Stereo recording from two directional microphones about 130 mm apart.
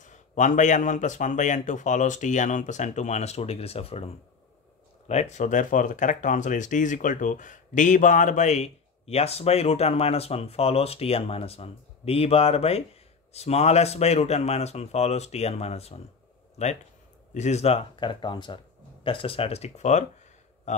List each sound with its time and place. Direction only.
0.0 s a man's voice: 70° left (ahead or behind)